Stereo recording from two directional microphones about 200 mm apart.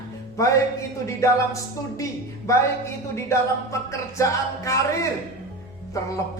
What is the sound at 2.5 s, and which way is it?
Speech, 15° left (ahead or behind).